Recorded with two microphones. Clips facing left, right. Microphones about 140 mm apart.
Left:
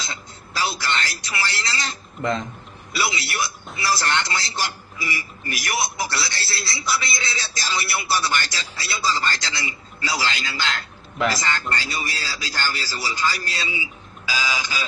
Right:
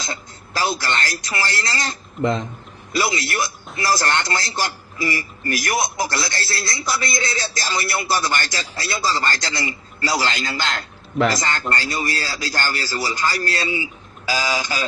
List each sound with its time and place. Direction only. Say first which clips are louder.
0.0 s a man's voice: right 4 dB; 45° right (ahead or behind)
2.9 s a man's voice: right 4 dB; 45° right (ahead or behind)